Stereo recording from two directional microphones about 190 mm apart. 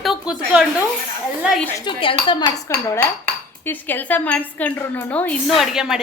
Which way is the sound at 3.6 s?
10° left (ahead or behind).